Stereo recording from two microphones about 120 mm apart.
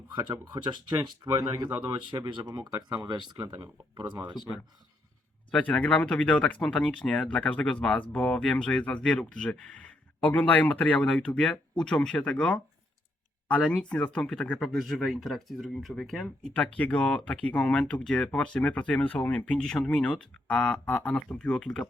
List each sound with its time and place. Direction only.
0.1 s speech: 35° right (ahead or behind)
2.6 s speech: 30° right (ahead or behind)
5.5 s speech: 10° left (ahead or behind)